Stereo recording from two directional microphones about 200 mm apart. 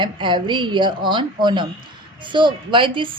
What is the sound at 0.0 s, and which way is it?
A woman's voice, 25° right (ahead or behind).